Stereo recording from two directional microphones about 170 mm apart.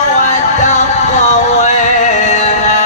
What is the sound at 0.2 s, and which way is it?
Music, 45° left (ahead or behind).